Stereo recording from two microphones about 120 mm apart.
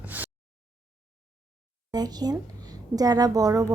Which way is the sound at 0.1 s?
15° right (ahead or behind).